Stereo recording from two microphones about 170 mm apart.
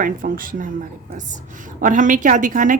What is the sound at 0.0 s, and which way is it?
Speech, 55° right (ahead or behind).